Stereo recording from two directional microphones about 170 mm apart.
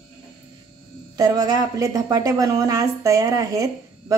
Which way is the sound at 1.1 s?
20° right (ahead or behind).